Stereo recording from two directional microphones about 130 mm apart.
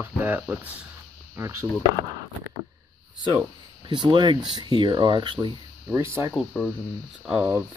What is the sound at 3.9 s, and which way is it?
Speech, 35° right (ahead or behind).